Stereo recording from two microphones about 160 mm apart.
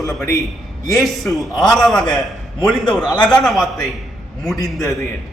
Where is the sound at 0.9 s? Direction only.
Centre (ahead or behind).